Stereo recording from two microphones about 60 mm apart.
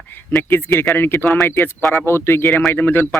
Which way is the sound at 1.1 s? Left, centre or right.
Left.